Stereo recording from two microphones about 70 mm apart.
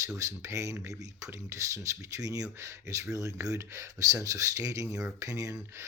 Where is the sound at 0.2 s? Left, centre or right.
Right.